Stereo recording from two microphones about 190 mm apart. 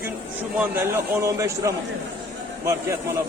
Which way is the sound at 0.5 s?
10° right (ahead or behind).